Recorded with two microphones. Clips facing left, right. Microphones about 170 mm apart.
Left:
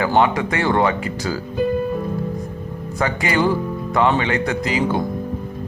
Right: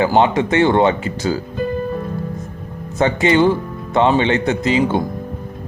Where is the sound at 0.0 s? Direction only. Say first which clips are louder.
Right 3 dB; 25° right (ahead or behind).